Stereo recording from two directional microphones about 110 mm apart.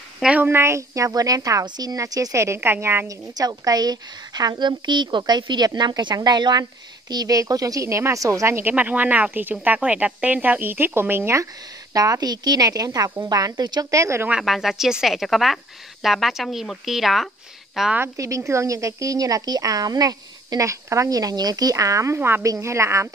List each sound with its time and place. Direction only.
0.2 s speech: 15° right (ahead or behind)
3.3 s a woman's voice: 35° right (ahead or behind)
14.3 s a woman's voice: centre (ahead or behind)
17.9 s a woman's voice: 25° right (ahead or behind)